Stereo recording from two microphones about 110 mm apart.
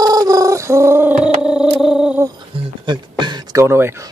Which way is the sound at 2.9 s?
45° right (ahead or behind).